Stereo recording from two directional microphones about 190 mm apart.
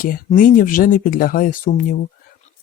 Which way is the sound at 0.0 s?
45° left (ahead or behind).